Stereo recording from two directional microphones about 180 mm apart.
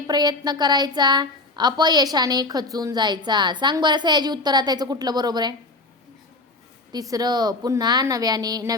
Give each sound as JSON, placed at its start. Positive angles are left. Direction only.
{"t": 0.1, "sound": "a woman's voice", "side_deg": -25}
{"t": 6.9, "sound": "a woman's voice", "side_deg": -20}